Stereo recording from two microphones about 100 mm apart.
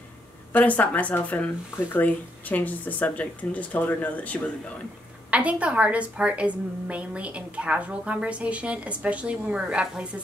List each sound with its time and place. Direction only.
0.5 s speech: 15° left (ahead or behind)
5.3 s a woman's voice: 15° right (ahead or behind)